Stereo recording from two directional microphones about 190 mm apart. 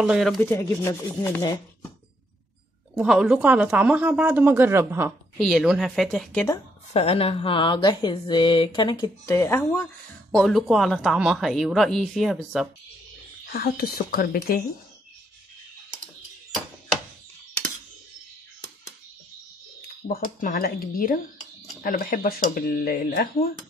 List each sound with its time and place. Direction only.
0.0 s speech: centre (ahead or behind)
0.4 s speech: 10° left (ahead or behind)
2.9 s speech: 5° right (ahead or behind)
5.4 s speech: centre (ahead or behind)
6.9 s speech: 30° left (ahead or behind); by 9.8 s 15° left (ahead or behind)
10.3 s speech: centre (ahead or behind)
13.5 s speech: 55° left (ahead or behind)
20.1 s speech: 50° left (ahead or behind)